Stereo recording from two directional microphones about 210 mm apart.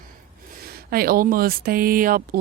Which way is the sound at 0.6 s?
45° right (ahead or behind).